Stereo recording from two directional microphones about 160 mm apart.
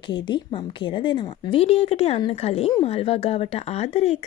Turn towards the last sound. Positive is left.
turn(degrees=40)  # may be behind; listen again after turning